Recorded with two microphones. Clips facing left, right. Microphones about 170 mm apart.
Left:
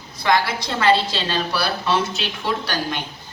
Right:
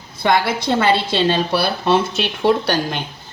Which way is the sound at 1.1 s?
55° right (ahead or behind).